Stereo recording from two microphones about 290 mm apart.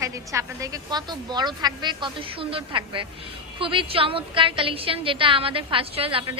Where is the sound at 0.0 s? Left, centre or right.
Centre.